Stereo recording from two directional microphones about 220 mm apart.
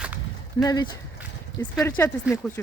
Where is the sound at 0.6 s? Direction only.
15° left (ahead or behind).